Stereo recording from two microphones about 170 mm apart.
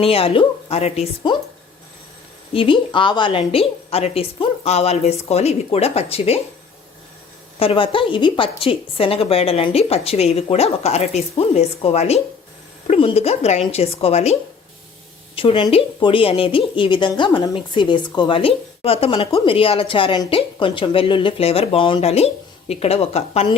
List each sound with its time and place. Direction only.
0.0 s speech: 35° left (ahead or behind)
2.5 s speech: 30° left (ahead or behind)
7.6 s speech: 30° left (ahead or behind)
15.4 s speech: 30° left (ahead or behind)